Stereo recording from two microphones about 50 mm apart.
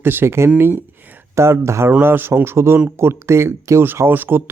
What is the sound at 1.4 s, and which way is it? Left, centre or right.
Speech, right.